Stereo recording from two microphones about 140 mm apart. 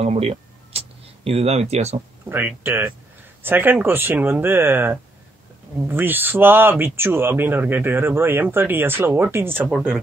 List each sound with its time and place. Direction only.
0.0 s speech: 45° right (ahead or behind)
2.2 s speech: 15° right (ahead or behind)
9.7 s speech: 5° right (ahead or behind)